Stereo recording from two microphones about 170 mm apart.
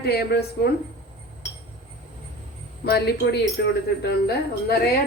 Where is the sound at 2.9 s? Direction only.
70° left (ahead or behind).